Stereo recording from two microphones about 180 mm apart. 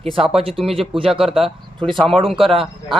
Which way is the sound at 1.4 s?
25° right (ahead or behind).